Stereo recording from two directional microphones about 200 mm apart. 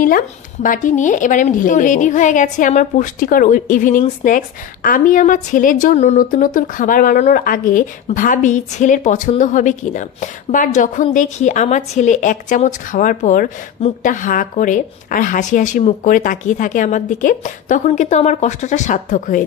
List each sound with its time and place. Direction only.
0.0 s a woman's voice: 45° left (ahead or behind)